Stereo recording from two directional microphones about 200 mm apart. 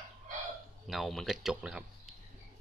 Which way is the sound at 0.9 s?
Centre (ahead or behind).